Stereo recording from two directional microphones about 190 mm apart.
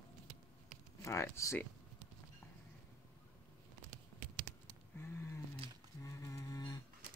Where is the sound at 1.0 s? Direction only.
15° left (ahead or behind).